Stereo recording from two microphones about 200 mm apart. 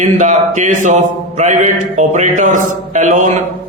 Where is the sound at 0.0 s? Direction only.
35° right (ahead or behind).